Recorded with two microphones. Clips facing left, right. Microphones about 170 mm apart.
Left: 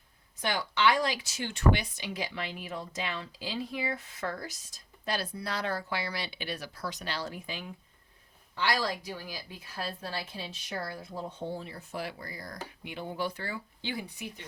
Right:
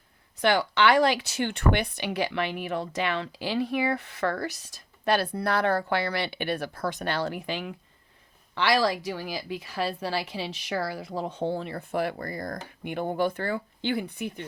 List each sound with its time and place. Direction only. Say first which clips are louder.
0.3 s a woman's voice: right 8 dB; 70° right (ahead or behind)